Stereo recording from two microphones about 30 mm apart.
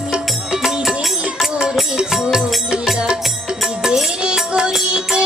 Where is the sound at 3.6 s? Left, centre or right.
Centre.